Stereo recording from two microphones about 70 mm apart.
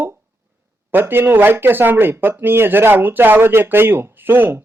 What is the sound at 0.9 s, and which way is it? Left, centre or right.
Speech, right.